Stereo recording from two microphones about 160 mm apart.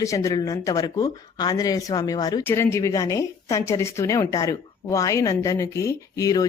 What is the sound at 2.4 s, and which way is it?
A woman's voice, 15° left (ahead or behind).